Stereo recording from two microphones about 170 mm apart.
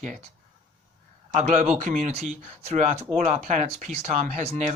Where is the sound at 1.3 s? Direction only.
45° right (ahead or behind).